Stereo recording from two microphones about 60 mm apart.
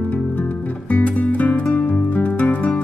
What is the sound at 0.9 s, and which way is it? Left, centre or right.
Music, left.